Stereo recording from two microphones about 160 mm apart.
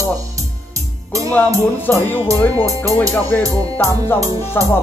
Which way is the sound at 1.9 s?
15° left (ahead or behind).